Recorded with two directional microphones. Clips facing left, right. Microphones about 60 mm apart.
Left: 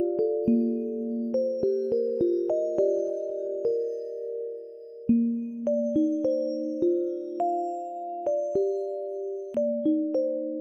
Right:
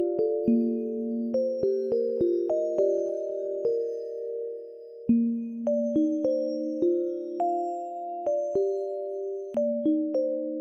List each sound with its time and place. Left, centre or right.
0.6 s music: left
2.3 s music: left
7.3 s music: centre